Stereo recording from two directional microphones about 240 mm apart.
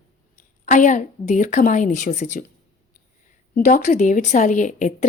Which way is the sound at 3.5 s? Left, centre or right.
Left.